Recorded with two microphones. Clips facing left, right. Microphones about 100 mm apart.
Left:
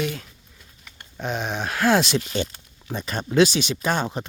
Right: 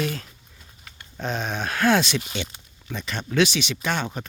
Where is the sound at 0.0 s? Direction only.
15° left (ahead or behind).